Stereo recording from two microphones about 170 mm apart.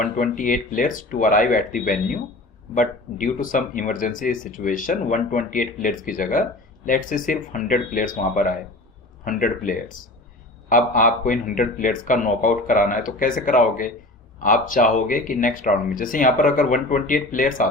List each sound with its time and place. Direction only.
0.0 s speech: 50° left (ahead or behind)